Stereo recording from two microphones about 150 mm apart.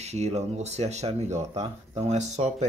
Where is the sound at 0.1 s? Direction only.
45° right (ahead or behind).